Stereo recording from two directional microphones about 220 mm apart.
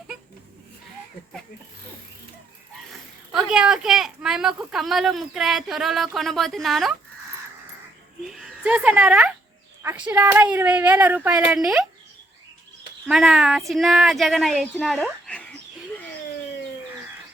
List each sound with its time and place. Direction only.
3.3 s speech: 5° right (ahead or behind)
8.3 s speech: 5° right (ahead or behind)
10.5 s speech: 5° right (ahead or behind)
13.1 s speech: 5° right (ahead or behind)